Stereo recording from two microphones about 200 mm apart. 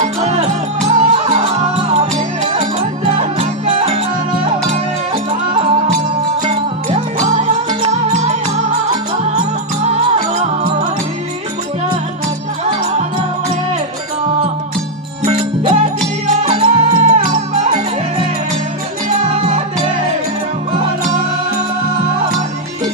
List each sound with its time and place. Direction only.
0.0 s music: 30° right (ahead or behind)
6.4 s music: 30° right (ahead or behind)
10.3 s music: 40° right (ahead or behind)
15.2 s music: 30° right (ahead or behind)
19.3 s music: 30° right (ahead or behind)